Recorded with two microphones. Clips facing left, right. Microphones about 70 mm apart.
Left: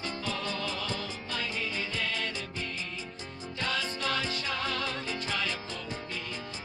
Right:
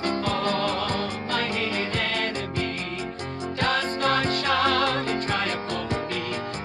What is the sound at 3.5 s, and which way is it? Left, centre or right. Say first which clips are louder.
Music: right 8 dB; right.